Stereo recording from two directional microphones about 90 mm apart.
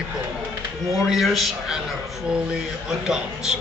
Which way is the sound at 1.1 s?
Centre (ahead or behind).